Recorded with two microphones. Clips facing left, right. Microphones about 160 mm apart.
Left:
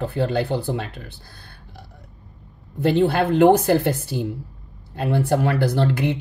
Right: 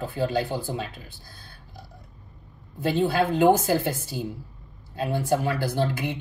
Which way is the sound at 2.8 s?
65° left (ahead or behind).